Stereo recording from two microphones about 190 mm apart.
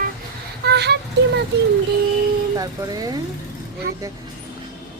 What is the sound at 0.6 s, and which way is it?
Speech, 60° right (ahead or behind).